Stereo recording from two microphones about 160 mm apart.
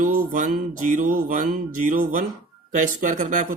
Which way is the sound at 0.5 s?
55° right (ahead or behind).